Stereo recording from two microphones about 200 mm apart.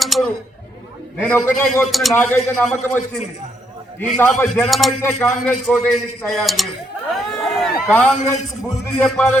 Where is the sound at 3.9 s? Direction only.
10° left (ahead or behind).